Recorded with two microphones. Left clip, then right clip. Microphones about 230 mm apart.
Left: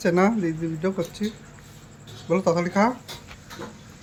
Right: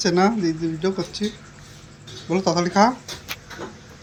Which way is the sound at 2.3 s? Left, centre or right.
Centre.